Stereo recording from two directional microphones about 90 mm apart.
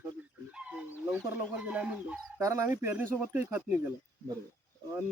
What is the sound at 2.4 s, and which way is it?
Speech, 35° right (ahead or behind).